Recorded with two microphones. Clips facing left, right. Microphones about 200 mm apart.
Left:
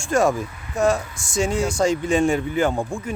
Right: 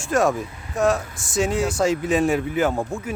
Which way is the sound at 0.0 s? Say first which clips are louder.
Left 1 dB; centre (ahead or behind).